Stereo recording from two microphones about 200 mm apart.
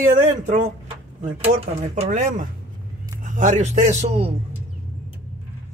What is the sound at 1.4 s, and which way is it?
Speech, 35° right (ahead or behind).